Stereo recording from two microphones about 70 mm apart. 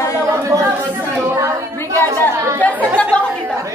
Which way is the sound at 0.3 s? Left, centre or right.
Right.